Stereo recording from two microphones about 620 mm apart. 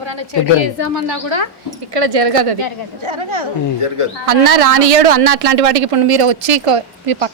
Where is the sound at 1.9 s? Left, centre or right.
Right.